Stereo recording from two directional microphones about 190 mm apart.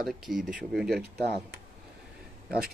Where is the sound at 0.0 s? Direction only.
Centre (ahead or behind).